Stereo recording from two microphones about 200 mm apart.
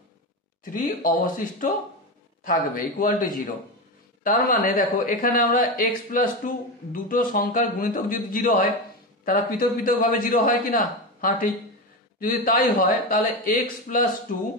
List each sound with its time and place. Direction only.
0.8 s speech: 45° left (ahead or behind)